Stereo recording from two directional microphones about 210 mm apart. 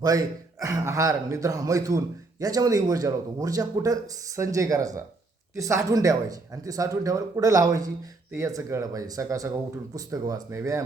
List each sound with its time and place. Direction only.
0.6 s a man's voice: 15° right (ahead or behind)